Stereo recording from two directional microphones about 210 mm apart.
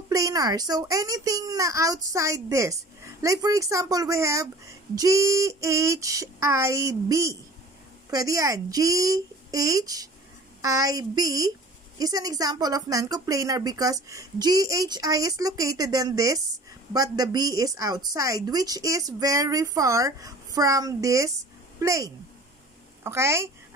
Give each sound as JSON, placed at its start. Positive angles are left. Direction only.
{"t": 0.1, "sound": "a woman's voice", "side_deg": -15}